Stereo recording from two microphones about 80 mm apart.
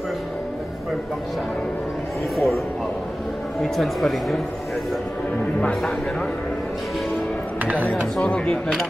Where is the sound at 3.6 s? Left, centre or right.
Centre.